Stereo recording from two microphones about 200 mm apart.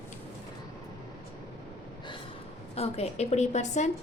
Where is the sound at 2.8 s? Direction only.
30° left (ahead or behind).